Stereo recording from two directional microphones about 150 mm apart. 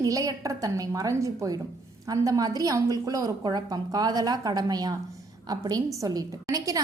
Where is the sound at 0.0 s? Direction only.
20° right (ahead or behind).